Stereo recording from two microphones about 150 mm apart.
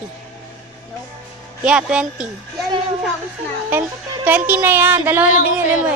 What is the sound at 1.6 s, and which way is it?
Speech, 5° right (ahead or behind).